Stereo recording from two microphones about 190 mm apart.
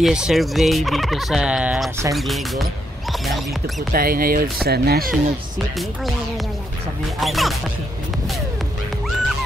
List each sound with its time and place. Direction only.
0.0 s fowl: centre (ahead or behind)
2.1 s speech: centre (ahead or behind)
3.9 s speech: 50° right (ahead or behind)
7.2 s fowl: centre (ahead or behind)